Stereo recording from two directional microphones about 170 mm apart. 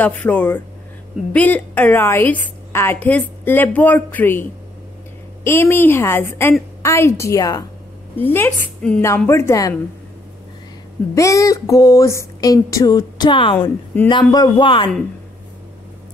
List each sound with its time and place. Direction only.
0.0 s a woman's voice: 10° left (ahead or behind)
11.1 s speech: 20° left (ahead or behind)